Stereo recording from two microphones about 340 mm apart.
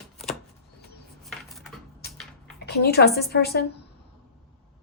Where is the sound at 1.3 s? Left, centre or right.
Centre.